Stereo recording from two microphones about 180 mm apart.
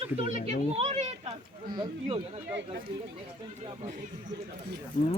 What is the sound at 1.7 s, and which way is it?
Speech, 25° right (ahead or behind).